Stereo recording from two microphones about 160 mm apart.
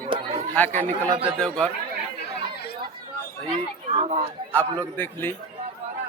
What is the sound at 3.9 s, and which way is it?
Speech, 40° right (ahead or behind).